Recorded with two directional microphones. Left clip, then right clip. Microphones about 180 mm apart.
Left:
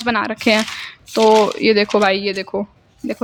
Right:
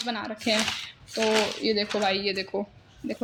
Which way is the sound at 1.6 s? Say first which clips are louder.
Left 11 dB; 50° left (ahead or behind).